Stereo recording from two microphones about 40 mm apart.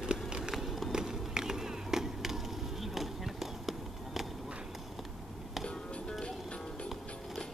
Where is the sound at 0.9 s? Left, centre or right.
Centre.